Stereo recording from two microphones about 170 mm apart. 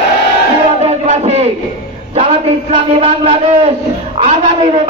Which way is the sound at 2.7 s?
35° right (ahead or behind).